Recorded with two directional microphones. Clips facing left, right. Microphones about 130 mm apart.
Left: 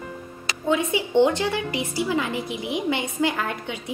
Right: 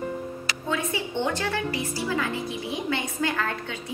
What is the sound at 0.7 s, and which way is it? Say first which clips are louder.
A woman's voice: left 7 dB; 20° left (ahead or behind).